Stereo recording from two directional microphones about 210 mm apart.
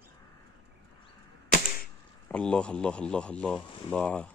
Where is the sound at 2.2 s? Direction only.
5° left (ahead or behind).